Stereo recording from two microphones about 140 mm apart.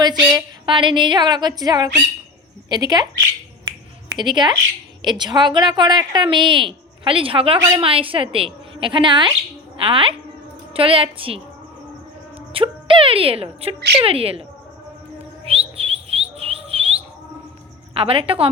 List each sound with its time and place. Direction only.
0.0 s a sound: 30° right (ahead or behind)
0.7 s a woman's voice: 35° right (ahead or behind)
4.2 s a woman's voice: 35° right (ahead or behind)
12.5 s a woman's voice: 40° right (ahead or behind)
15.4 s a sound: 45° right (ahead or behind)
17.9 s a woman's voice: 40° right (ahead or behind)